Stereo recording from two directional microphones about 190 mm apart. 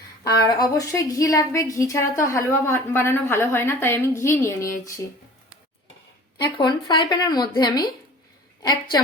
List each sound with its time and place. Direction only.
0.4 s a woman's voice: 20° left (ahead or behind)
6.6 s speech: 25° left (ahead or behind)